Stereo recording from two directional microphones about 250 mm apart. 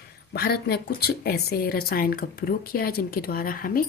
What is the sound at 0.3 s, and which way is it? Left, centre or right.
Speech, left.